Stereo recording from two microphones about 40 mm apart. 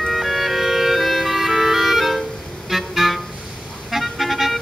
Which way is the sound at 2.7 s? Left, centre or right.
Centre.